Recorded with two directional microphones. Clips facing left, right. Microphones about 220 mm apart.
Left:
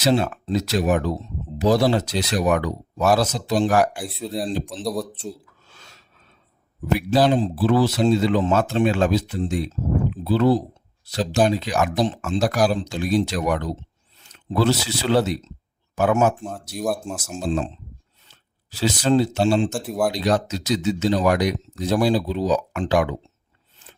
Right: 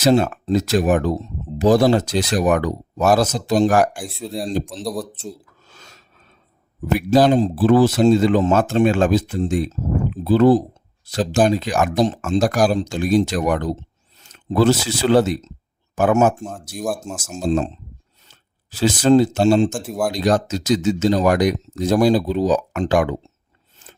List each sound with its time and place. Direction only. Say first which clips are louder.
0.0 s speech: right 4 dB; 45° right (ahead or behind)
3.9 s speech: even; centre (ahead or behind)
5.6 s a sound: right 3 dB; 40° right (ahead or behind)
6.8 s speech: right 4 dB; 45° right (ahead or behind)
16.4 s speech: even; centre (ahead or behind)
17.4 s speech: right 5 dB; 45° right (ahead or behind)
19.7 s speech: even; centre (ahead or behind)
20.1 s speech: right 3 dB; 45° right (ahead or behind)